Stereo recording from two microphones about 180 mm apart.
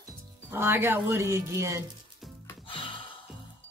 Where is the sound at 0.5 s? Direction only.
15° right (ahead or behind).